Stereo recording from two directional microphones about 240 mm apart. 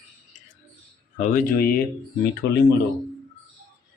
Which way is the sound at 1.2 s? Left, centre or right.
Left.